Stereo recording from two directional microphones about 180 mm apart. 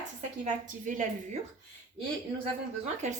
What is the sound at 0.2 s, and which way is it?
Speech, 45° right (ahead or behind).